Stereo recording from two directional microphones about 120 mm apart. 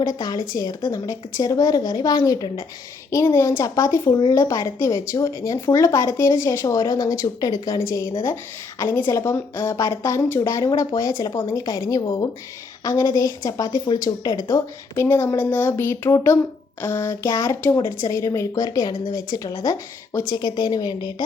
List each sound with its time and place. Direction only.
0.0 s a woman's voice: 35° left (ahead or behind)